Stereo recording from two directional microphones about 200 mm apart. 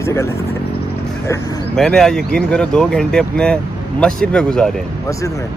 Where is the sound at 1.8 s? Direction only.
Centre (ahead or behind).